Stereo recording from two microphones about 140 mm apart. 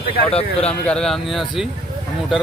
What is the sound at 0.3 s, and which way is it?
Speech, 45° left (ahead or behind).